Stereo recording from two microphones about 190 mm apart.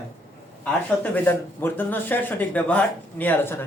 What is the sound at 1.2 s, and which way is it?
Speech, 10° left (ahead or behind).